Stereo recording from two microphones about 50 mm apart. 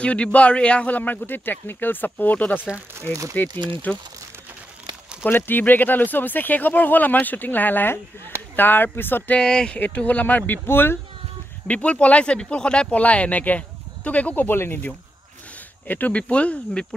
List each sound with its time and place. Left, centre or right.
0.0 s speech: left
5.2 s speech: left
9.4 s speech: centre
9.8 s speech: left
11.6 s speech: left
13.0 s speech: left
15.9 s speech: left